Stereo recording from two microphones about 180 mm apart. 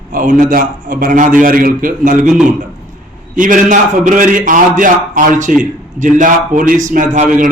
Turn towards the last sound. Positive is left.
turn(degrees=-45)  # may be behind; listen again after turning